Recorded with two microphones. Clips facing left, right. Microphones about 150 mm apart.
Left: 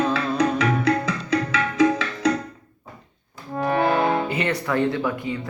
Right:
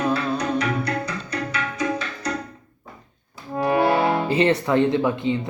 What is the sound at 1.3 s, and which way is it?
Tabla, 90° left.